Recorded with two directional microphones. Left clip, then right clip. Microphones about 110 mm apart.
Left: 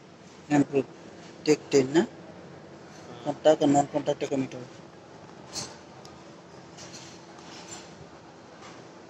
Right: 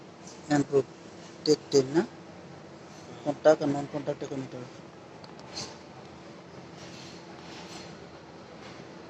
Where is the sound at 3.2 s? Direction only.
25° left (ahead or behind).